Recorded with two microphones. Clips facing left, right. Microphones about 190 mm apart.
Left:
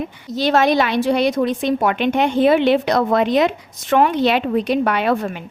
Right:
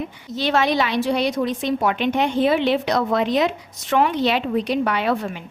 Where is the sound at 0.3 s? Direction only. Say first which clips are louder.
Left 4 dB; 40° left (ahead or behind).